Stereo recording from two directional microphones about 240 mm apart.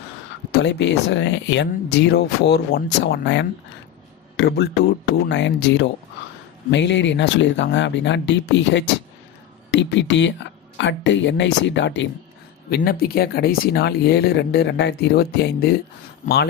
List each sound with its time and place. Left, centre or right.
0.5 s a man's voice: left